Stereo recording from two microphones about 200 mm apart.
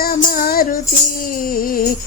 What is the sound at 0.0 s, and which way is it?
Music, 45° left (ahead or behind).